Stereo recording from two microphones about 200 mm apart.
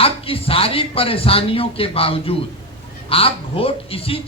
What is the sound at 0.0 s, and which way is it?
A man's voice, 30° left (ahead or behind).